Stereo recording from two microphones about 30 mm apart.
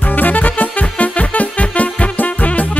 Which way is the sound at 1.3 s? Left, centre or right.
Left.